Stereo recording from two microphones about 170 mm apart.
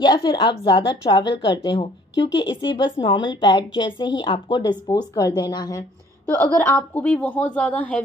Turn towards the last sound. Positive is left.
turn(degrees=10)  # may be behind; listen again after turning